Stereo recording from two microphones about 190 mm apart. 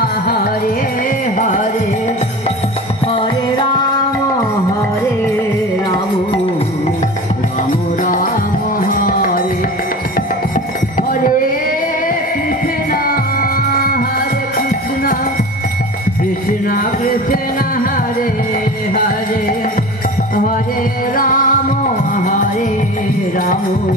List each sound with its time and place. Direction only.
0.0 s music: 55° left (ahead or behind)
1.4 s music: 40° left (ahead or behind)
3.1 s music: 25° left (ahead or behind)
8.0 s music: 45° left (ahead or behind)
11.0 s a sound: 45° left (ahead or behind)
12.9 s music: 50° left (ahead or behind)
16.4 s music: 45° left (ahead or behind)
21.2 s music: 45° left (ahead or behind)